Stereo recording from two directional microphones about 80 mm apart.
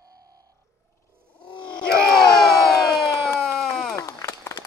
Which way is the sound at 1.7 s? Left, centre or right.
Left.